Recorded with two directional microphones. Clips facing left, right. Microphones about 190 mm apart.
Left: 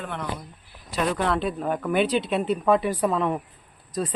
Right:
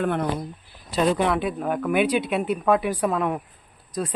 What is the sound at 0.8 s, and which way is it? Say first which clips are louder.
Speech: right 3 dB; 25° right (ahead or behind).